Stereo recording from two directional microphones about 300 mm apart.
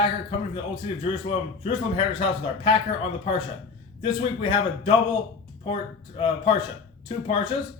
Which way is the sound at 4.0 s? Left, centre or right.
Centre.